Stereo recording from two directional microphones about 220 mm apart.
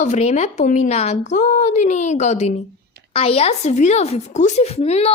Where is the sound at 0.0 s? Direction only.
30° left (ahead or behind).